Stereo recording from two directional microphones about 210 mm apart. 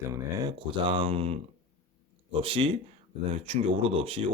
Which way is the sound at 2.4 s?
25° right (ahead or behind).